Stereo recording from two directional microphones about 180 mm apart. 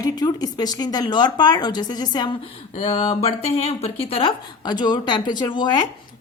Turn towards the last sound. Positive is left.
turn(degrees=25)  # may be behind; listen again after turning